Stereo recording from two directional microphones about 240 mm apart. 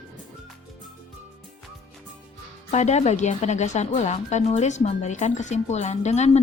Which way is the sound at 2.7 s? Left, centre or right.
Left.